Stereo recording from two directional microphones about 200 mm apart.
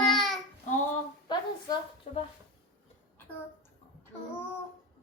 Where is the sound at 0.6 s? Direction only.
40° left (ahead or behind).